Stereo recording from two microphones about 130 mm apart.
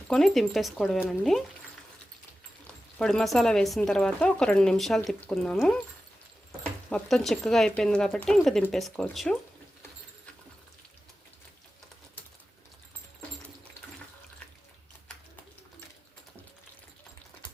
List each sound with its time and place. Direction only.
0.1 s speech: centre (ahead or behind)
3.0 s speech: 5° left (ahead or behind)
6.9 s speech: centre (ahead or behind)